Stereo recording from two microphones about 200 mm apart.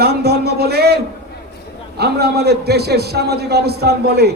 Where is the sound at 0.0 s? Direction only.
55° right (ahead or behind).